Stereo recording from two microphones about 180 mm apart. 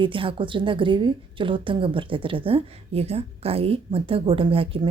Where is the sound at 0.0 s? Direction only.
30° right (ahead or behind).